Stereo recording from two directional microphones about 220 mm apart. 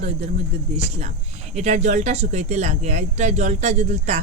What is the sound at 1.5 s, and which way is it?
Speech, 30° right (ahead or behind).